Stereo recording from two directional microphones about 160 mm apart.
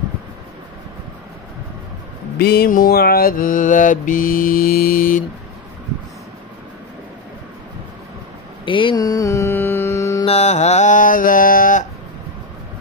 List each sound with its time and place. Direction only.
2.3 s mantra: 80° left; by 5.2 s 60° left (ahead or behind)
8.6 s mantra: 30° left (ahead or behind)
10.2 s music: 45° left (ahead or behind); by 11.8 s 60° left (ahead or behind)